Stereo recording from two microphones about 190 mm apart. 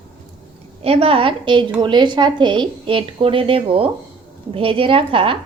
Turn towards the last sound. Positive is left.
turn(degrees=-30)  # may be behind; listen again after turning